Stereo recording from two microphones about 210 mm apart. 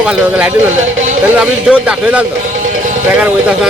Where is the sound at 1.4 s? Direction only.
5° right (ahead or behind).